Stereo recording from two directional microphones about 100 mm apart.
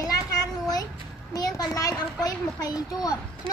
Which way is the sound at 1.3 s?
35° left (ahead or behind).